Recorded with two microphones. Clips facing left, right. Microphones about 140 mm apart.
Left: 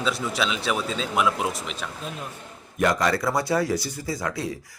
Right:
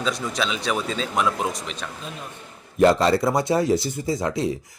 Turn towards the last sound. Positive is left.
turn(degrees=-20)  # may be behind; listen again after turning